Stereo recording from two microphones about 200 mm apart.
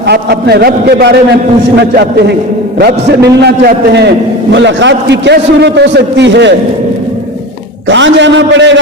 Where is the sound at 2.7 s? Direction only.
55° right (ahead or behind).